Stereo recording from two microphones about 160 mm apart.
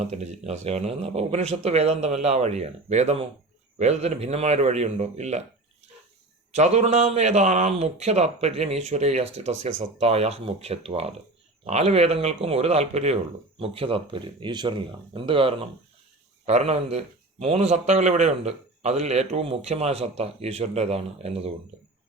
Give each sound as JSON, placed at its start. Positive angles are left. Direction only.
{"t": 0.0, "sound": "a man's voice", "side_deg": -45}
{"t": 6.5, "sound": "a man's voice", "side_deg": -45}